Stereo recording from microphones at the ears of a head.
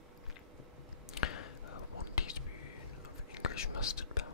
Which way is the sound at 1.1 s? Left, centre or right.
Left.